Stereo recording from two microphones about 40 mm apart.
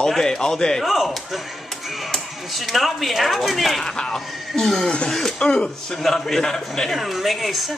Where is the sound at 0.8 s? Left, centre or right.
Centre.